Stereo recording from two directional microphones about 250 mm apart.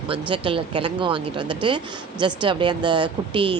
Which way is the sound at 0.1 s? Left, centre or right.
Right.